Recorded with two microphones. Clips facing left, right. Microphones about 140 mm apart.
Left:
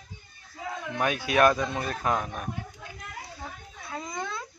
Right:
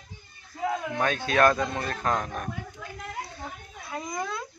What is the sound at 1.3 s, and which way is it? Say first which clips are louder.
Speech: even; 15° left (ahead or behind).